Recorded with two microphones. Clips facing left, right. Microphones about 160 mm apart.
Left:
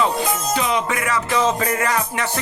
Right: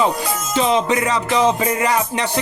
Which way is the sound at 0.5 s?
25° right (ahead or behind).